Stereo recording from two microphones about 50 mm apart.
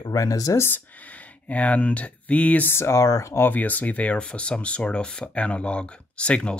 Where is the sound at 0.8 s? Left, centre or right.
Left.